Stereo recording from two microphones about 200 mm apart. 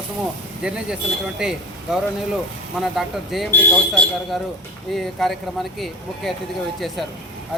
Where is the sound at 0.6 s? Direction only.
5° right (ahead or behind).